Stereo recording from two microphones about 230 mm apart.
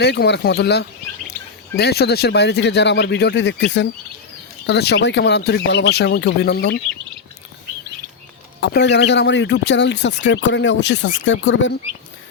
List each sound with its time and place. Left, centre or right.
0.0 s speech: left
8.6 s speech: left